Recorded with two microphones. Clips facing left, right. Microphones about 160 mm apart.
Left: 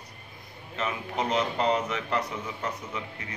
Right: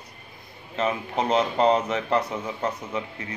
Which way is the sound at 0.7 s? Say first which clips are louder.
Right 5 dB; 30° right (ahead or behind).